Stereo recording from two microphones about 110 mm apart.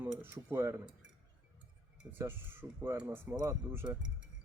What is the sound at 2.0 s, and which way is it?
Speech, 20° right (ahead or behind).